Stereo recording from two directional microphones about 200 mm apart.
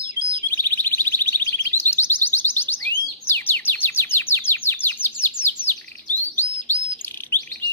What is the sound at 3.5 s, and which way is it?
Bird, 10° left (ahead or behind).